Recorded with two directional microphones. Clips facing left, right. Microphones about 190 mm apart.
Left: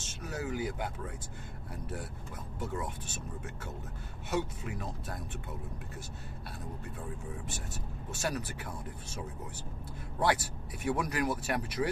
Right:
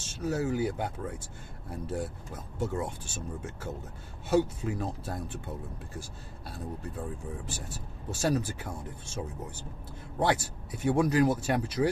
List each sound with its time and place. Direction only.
0.1 s speech: 30° right (ahead or behind)
7.4 s speech: 30° right (ahead or behind)
10.2 s speech: 25° right (ahead or behind)